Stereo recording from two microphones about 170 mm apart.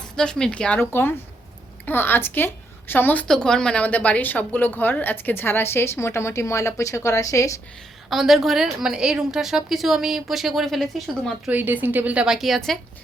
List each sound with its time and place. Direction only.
0.2 s a woman's voice: 5° left (ahead or behind)
8.1 s a woman's voice: centre (ahead or behind)
11.5 s a woman's voice: 10° right (ahead or behind)